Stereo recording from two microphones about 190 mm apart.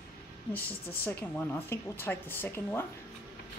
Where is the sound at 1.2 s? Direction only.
10° left (ahead or behind).